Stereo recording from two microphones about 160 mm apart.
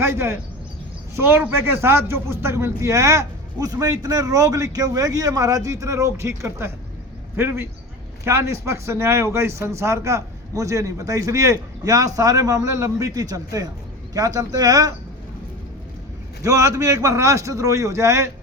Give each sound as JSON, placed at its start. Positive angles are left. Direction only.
{"t": 0.0, "sound": "a man's voice", "side_deg": -15}
{"t": 16.4, "sound": "a man's voice", "side_deg": -20}